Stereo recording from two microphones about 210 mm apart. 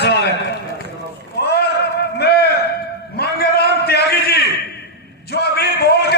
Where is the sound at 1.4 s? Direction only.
50° left (ahead or behind).